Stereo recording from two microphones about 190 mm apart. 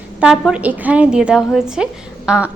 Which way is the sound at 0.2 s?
5° right (ahead or behind).